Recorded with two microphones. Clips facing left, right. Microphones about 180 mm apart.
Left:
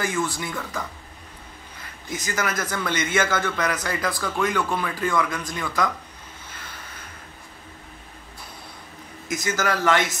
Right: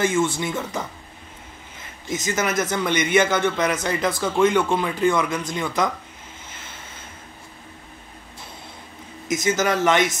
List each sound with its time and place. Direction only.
0.0 s a man's voice: 25° right (ahead or behind)
6.5 s crow: 25° right (ahead or behind)
9.3 s a man's voice: 20° right (ahead or behind)